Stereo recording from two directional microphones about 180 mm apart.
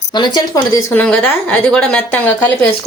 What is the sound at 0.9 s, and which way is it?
A woman's voice, 10° left (ahead or behind).